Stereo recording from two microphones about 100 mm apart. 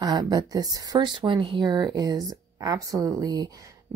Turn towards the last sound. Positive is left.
turn(degrees=-35)  # may be behind; listen again after turning